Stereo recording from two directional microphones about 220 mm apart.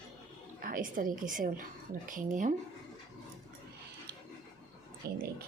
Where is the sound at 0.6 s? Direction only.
40° right (ahead or behind).